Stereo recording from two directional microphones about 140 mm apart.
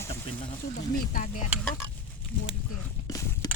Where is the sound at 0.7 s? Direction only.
75° left (ahead or behind).